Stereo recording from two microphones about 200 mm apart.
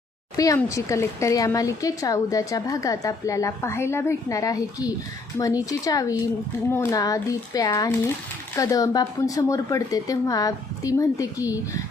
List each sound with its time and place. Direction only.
0.3 s speech: 15° left (ahead or behind)